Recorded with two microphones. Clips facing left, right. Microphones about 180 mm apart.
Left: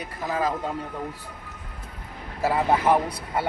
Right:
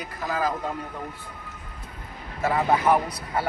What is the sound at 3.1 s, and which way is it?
Speech, 25° left (ahead or behind).